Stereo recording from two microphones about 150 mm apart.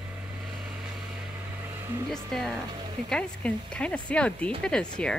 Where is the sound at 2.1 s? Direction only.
5° left (ahead or behind).